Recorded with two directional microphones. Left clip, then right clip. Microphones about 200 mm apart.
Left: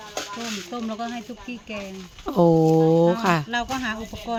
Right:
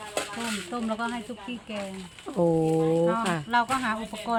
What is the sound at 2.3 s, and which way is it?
Speech, 45° left (ahead or behind).